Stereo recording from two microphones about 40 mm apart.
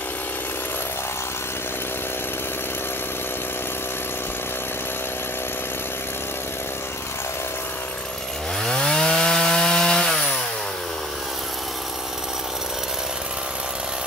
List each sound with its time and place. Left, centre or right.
8.6 s wood: left